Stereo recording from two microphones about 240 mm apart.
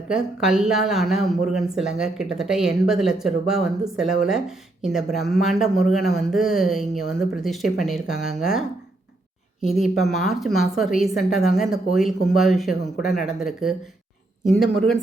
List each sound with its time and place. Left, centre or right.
0.1 s speech: centre